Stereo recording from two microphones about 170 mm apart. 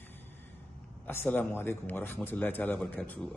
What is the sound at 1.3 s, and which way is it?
A man's voice, 10° left (ahead or behind).